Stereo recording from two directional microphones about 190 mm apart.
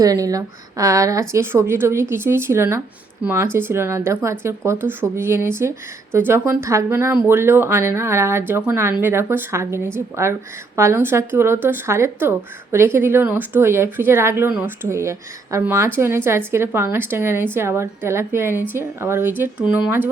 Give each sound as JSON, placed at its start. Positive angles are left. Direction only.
{"t": 0.0, "sound": "speech", "side_deg": -20}